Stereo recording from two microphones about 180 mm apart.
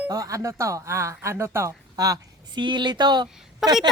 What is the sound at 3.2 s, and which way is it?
Speech, centre (ahead or behind).